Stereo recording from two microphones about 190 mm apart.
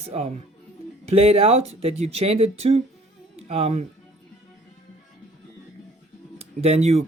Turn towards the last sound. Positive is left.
turn(degrees=-35)  # may be behind; listen again after turning